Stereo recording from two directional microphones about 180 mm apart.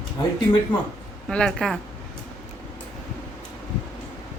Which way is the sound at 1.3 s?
5° left (ahead or behind).